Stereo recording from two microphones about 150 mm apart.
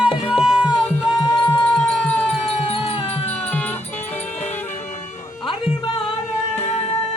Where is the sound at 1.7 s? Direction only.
5° left (ahead or behind).